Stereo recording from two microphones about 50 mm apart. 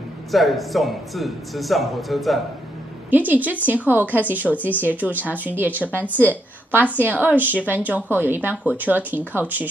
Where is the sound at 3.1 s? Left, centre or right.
Right.